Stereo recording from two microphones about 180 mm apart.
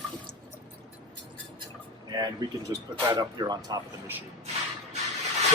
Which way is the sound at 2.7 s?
20° right (ahead or behind).